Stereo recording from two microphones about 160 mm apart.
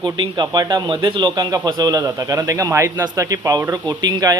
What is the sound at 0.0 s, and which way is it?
Speech, 25° right (ahead or behind).